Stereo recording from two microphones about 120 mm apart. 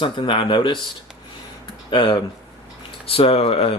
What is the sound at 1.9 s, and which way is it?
Speech, 40° left (ahead or behind).